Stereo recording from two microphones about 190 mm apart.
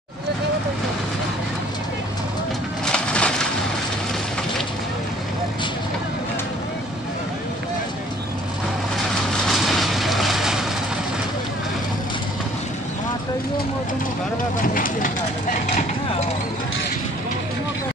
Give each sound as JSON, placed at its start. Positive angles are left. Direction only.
{"t": 2.8, "sound": "a sound", "side_deg": 5}
{"t": 9.5, "sound": "vehicle", "side_deg": 0}
{"t": 14.6, "sound": "vehicle", "side_deg": 45}